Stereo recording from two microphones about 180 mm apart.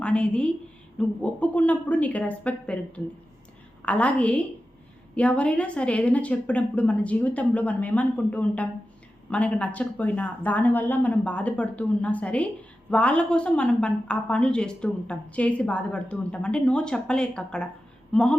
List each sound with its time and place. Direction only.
0.0 s a woman's voice: 5° left (ahead or behind)